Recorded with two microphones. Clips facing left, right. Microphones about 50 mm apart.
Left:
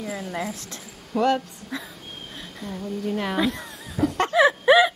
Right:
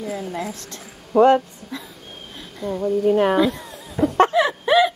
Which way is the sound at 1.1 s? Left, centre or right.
Right.